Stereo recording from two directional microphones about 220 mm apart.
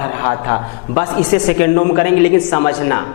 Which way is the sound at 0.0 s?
15° left (ahead or behind).